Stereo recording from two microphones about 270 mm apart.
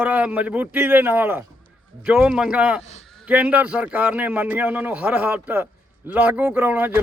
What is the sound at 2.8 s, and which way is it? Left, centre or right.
Speech, left.